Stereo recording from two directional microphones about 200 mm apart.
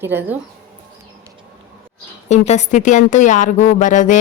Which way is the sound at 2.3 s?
35° left (ahead or behind).